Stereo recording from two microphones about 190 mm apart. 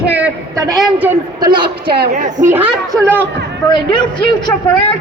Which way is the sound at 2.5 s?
15° right (ahead or behind).